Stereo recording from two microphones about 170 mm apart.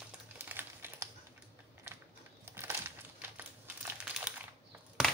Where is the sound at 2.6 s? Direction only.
15° right (ahead or behind).